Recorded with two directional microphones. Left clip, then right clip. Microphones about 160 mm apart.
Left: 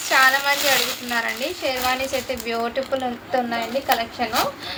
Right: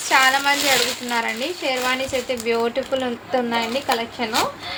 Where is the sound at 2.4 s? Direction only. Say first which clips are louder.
Right 3 dB; 25° right (ahead or behind).